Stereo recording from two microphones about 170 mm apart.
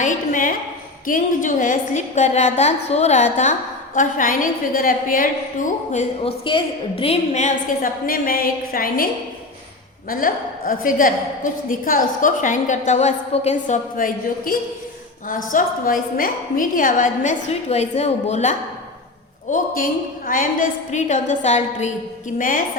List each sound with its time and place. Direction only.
0.0 s a sound: 50° left (ahead or behind)
1.0 s a woman's voice: 50° left (ahead or behind)
10.1 s a woman's voice: 55° left (ahead or behind)
19.5 s a woman's voice: 50° left (ahead or behind)
22.4 s a woman's voice: 55° left (ahead or behind)